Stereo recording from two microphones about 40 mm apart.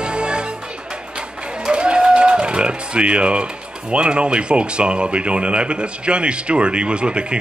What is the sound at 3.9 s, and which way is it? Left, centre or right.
Speech, right.